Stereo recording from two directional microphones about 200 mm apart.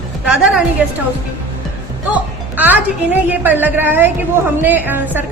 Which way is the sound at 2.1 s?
10° right (ahead or behind).